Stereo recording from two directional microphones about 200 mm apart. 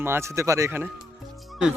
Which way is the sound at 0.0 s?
10° right (ahead or behind).